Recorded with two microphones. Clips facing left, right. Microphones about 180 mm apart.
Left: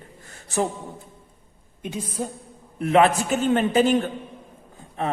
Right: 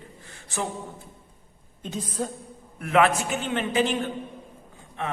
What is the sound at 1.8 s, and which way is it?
Speech, 10° left (ahead or behind).